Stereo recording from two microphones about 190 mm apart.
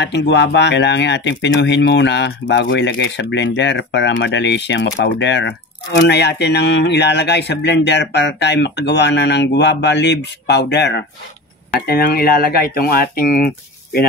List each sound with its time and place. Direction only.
0.0 s speech: 65° left (ahead or behind)